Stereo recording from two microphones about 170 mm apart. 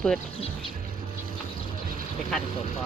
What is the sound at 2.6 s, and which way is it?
Speech, 40° left (ahead or behind).